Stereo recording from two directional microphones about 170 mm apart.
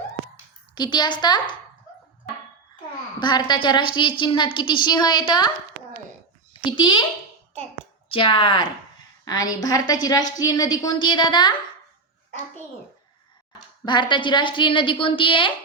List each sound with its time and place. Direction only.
0.8 s a woman's voice: 25° left (ahead or behind)
3.2 s a woman's voice: 25° left (ahead or behind)
6.5 s a child's voice: 30° left (ahead or behind)
8.1 s a woman's voice: 30° left (ahead or behind)
13.8 s a woman's voice: 25° left (ahead or behind)